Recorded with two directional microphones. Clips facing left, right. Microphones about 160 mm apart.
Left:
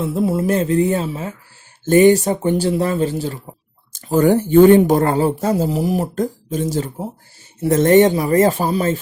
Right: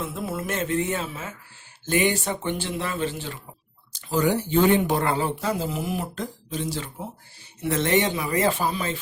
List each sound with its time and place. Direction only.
0.0 s speech: 30° left (ahead or behind)